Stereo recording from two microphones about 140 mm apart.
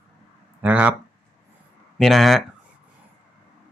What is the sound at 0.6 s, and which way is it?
Speech, 10° right (ahead or behind).